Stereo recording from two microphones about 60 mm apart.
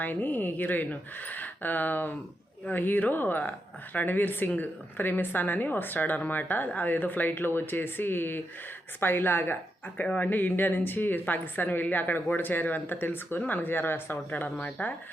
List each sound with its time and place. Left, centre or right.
0.0 s a woman's voice: left
14.6 s speech: left